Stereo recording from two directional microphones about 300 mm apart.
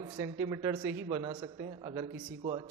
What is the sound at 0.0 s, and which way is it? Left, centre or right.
Speech, centre.